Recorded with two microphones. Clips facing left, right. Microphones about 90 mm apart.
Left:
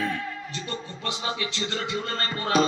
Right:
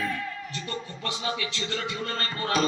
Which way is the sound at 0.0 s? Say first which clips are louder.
Left 2 dB; 20° left (ahead or behind).